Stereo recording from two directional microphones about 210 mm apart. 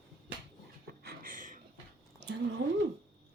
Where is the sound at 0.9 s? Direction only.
45° right (ahead or behind).